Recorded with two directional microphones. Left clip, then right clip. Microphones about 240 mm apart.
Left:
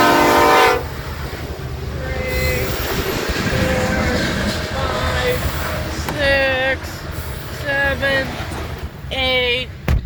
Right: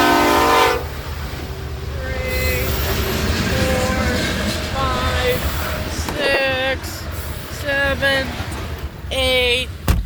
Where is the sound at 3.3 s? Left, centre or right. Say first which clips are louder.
Even; right.